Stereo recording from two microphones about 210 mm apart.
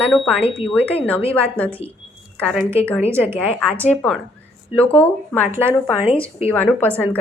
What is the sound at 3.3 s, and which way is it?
A woman's voice, 10° left (ahead or behind).